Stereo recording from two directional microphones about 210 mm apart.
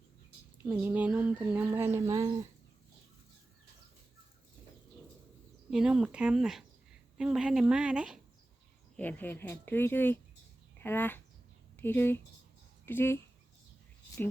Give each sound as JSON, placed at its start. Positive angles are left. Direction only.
{"t": 0.6, "sound": "speech", "side_deg": -10}
{"t": 5.7, "sound": "speech", "side_deg": -5}
{"t": 9.0, "sound": "speech", "side_deg": 10}